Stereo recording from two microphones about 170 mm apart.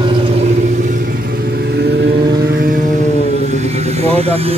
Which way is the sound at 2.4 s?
60° right (ahead or behind).